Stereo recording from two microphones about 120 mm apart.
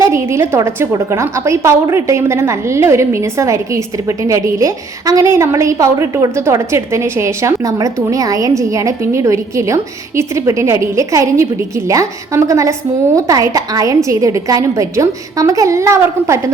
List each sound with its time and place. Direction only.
0.0 s a woman's voice: 20° right (ahead or behind)